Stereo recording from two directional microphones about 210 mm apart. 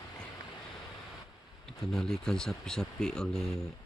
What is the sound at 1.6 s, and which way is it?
Speech, centre (ahead or behind).